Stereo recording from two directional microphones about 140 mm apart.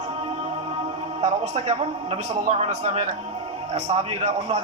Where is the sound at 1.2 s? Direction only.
55° right (ahead or behind).